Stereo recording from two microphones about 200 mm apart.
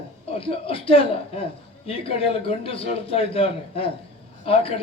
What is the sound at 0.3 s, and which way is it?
A man's voice, 30° left (ahead or behind).